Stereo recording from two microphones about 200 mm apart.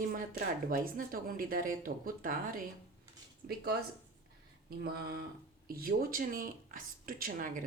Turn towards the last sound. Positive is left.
turn(degrees=-40)  # may be behind; listen again after turning